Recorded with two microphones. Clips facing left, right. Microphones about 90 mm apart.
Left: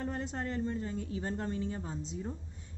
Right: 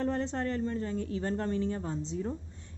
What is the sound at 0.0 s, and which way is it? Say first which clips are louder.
A woman's voice: right 6 dB; 15° left (ahead or behind).